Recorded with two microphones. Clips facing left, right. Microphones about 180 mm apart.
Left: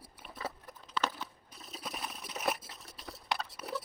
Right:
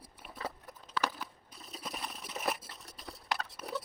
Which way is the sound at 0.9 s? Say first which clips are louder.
Even; 10° right (ahead or behind).